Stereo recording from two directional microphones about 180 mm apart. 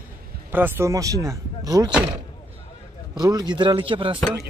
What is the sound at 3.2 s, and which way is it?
Speech, 20° right (ahead or behind).